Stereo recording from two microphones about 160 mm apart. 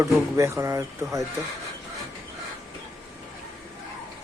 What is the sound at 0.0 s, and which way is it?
Speech, 20° right (ahead or behind).